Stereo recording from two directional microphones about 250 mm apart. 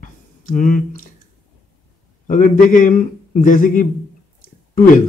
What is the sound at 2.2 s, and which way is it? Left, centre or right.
Speech, left.